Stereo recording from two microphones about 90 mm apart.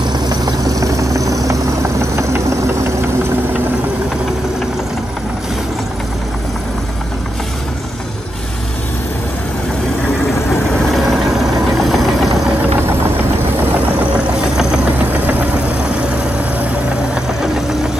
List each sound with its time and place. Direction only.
0.0 s vehicle: 50° right (ahead or behind)
10.5 s vehicle: centre (ahead or behind)
13.7 s vehicle: 15° right (ahead or behind)
17.1 s vehicle: 5° right (ahead or behind)